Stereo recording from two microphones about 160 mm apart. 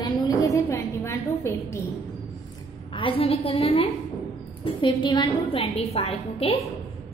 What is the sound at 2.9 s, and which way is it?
A woman's voice, 35° left (ahead or behind).